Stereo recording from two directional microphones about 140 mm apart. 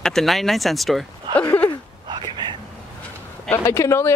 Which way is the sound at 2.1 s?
35° right (ahead or behind).